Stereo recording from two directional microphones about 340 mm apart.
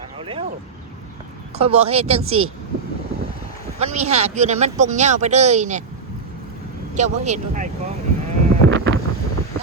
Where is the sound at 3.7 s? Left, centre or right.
Centre.